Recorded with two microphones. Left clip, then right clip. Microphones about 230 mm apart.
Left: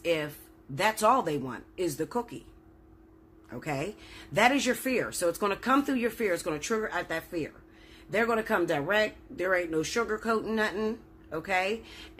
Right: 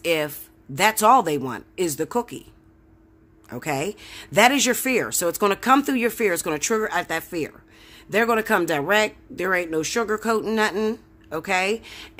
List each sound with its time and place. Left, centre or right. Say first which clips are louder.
0.0 s speech: right 7 dB; right
3.4 s speech: right 8 dB; right